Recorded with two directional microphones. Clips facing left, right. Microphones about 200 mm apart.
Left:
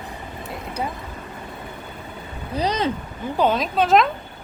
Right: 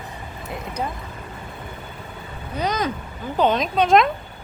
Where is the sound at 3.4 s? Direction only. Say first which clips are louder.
Right 1 dB; 5° left (ahead or behind).